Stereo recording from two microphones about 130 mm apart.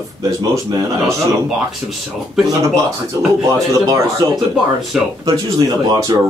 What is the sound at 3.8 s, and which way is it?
Speech, 30° right (ahead or behind).